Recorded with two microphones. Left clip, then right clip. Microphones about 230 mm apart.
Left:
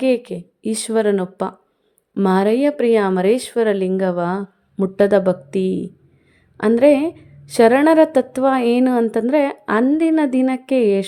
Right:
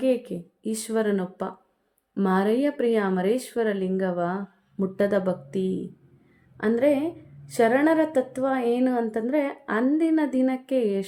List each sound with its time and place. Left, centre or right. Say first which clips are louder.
0.0 s a woman's voice: left 6 dB; left